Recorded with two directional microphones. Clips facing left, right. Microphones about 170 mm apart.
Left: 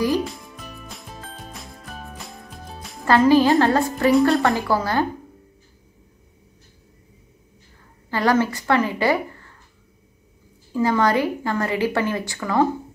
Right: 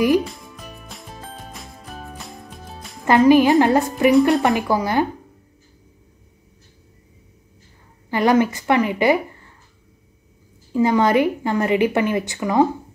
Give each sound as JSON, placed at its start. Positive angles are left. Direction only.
{"t": 0.8, "sound": "music", "side_deg": 0}
{"t": 3.1, "sound": "a woman's voice", "side_deg": -15}
{"t": 8.1, "sound": "a woman's voice", "side_deg": -20}
{"t": 10.7, "sound": "a woman's voice", "side_deg": -20}